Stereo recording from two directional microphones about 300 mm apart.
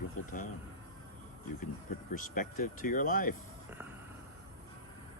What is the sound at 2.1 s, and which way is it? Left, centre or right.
Speech, left.